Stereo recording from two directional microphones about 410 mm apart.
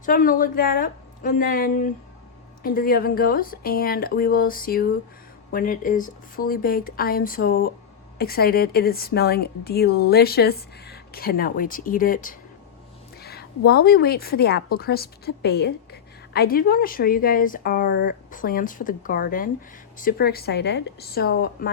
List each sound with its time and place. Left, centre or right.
0.0 s a woman's voice: centre
13.7 s a woman's voice: left